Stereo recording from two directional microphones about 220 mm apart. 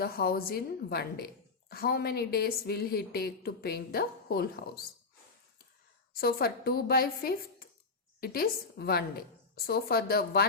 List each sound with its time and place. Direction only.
0.0 s speech: 45° left (ahead or behind)
6.1 s speech: 45° left (ahead or behind)